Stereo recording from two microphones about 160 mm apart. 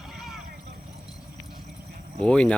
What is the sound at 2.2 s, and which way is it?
Speech, 5° left (ahead or behind).